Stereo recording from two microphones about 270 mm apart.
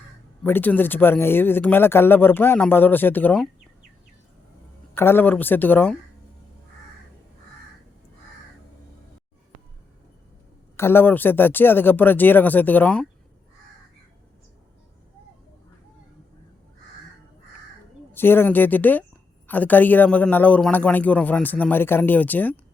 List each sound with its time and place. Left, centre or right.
0.4 s speech: centre
4.9 s speech: centre
10.8 s speech: centre
18.1 s speech: centre